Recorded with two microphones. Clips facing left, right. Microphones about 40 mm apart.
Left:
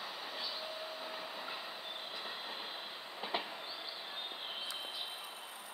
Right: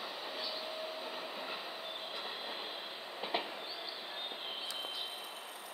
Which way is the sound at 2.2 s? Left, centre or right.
Centre.